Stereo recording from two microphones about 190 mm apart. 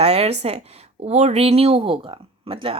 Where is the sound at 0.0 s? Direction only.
30° right (ahead or behind).